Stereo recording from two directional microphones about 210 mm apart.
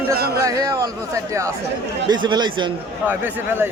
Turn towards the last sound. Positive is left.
turn(degrees=-10)  # may be behind; listen again after turning